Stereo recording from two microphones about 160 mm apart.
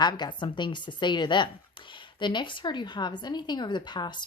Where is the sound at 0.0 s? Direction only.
25° left (ahead or behind).